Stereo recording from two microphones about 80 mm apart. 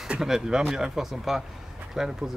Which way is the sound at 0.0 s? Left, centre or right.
Centre.